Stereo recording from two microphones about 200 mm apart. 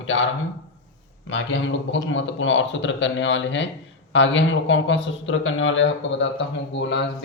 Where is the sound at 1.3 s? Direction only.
65° left (ahead or behind).